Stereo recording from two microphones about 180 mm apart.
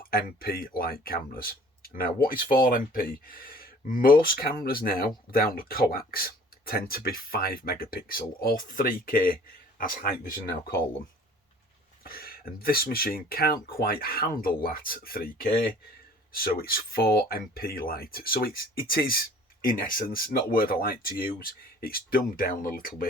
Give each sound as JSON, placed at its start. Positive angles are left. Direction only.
{"t": 0.1, "sound": "speech", "side_deg": 55}
{"t": 12.0, "sound": "speech", "side_deg": 55}